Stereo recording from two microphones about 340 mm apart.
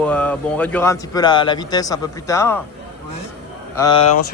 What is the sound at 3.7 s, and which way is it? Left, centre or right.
Speech, centre.